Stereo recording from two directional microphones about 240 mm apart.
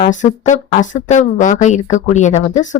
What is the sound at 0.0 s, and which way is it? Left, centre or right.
A woman's voice, left.